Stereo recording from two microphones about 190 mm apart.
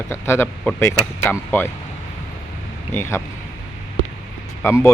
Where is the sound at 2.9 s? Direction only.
15° left (ahead or behind).